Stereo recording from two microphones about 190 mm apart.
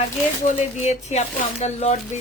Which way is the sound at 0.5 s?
40° left (ahead or behind).